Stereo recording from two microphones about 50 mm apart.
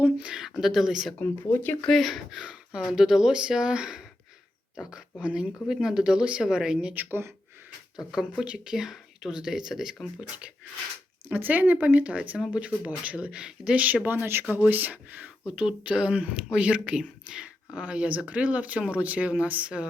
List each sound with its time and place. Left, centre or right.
0.2 s speech: centre
0.5 s speech: centre
1.2 s speech: left
1.9 s speech: centre
2.3 s speech: centre
5.6 s speech: centre
7.1 s speech: right
7.9 s speech: centre
10.2 s speech: right
13.7 s speech: right
15.4 s speech: right